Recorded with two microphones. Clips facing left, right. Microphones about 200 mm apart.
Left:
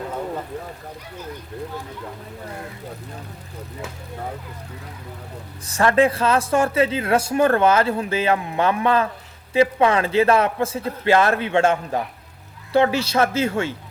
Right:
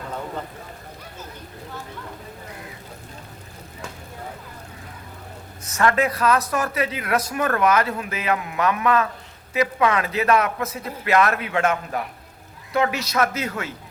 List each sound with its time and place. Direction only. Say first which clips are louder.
5.6 s speech: left 4 dB; 30° left (ahead or behind)